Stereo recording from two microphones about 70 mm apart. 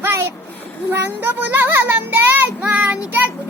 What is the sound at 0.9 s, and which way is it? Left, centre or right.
Child singing, right.